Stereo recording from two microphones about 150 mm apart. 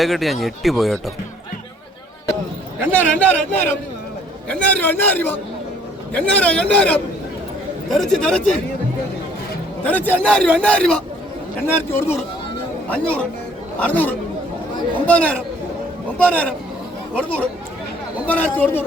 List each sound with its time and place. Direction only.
0.0 s speech: centre (ahead or behind)
2.9 s a man's voice: 10° left (ahead or behind)
9.8 s a man's voice: 10° left (ahead or behind)
18.3 s a man's voice: 10° left (ahead or behind)